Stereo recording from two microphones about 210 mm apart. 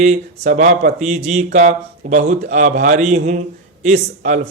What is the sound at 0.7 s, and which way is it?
Speech, 45° right (ahead or behind).